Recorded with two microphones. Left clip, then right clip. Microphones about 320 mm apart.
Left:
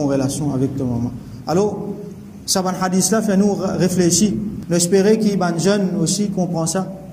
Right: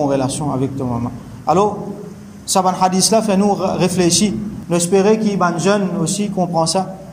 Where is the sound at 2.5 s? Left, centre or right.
Centre.